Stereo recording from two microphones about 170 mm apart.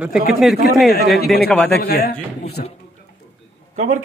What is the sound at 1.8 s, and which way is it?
Speech, 65° left (ahead or behind).